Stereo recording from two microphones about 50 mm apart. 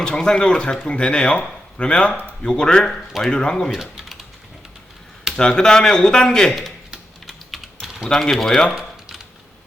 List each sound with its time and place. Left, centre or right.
0.0 s speech: centre
3.7 s speech: centre
5.4 s speech: centre
7.3 s typing: centre
8.1 s speech: centre